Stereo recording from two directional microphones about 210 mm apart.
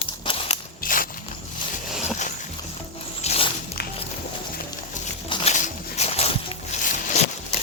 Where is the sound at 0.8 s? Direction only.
40° left (ahead or behind).